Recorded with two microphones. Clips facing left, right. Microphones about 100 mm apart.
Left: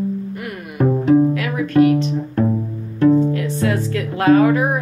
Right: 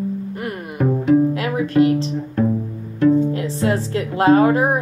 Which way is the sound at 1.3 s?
25° right (ahead or behind).